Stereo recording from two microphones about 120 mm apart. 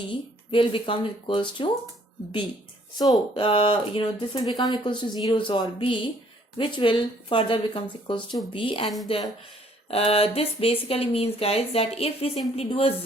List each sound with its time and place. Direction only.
0.1 s speech: 45° left (ahead or behind)
3.3 s a woman's voice: 50° left (ahead or behind)